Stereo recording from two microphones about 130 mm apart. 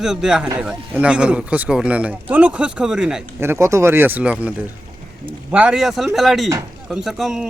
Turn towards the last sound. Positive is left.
turn(degrees=0)  # may be behind; listen again after turning